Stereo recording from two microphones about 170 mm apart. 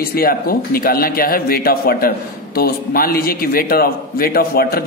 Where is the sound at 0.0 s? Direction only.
60° left (ahead or behind).